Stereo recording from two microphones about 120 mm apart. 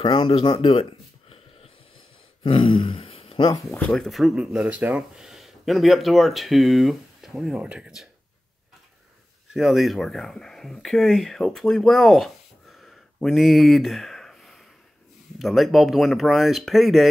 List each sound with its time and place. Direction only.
0.0 s speech: 45° left (ahead or behind)
2.4 s speech: 50° left (ahead or behind)
3.9 s speech: centre (ahead or behind)
9.5 s speech: centre (ahead or behind)